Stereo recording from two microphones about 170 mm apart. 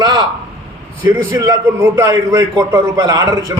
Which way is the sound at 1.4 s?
20° right (ahead or behind).